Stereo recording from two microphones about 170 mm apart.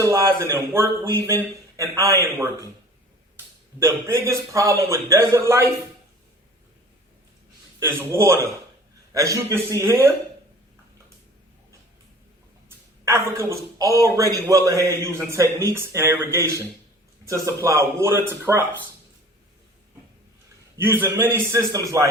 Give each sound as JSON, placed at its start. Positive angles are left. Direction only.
{"t": 0.0, "sound": "a man's voice", "side_deg": -20}
{"t": 3.8, "sound": "a man's voice", "side_deg": -15}
{"t": 7.8, "sound": "a man's voice", "side_deg": -15}
{"t": 12.6, "sound": "a man's voice", "side_deg": -15}
{"t": 20.7, "sound": "a man's voice", "side_deg": -15}